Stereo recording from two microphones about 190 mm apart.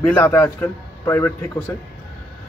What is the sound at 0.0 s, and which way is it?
A man's voice, 10° left (ahead or behind).